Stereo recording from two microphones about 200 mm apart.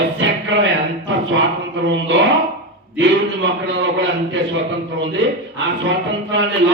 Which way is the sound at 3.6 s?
65° right (ahead or behind).